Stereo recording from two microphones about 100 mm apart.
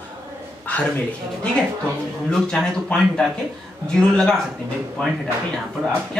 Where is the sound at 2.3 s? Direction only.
5° left (ahead or behind).